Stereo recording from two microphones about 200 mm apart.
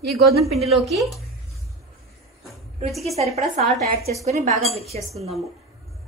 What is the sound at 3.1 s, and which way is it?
A woman's voice, 30° right (ahead or behind).